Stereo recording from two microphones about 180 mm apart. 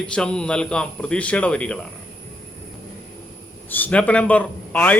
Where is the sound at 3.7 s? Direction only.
10° left (ahead or behind).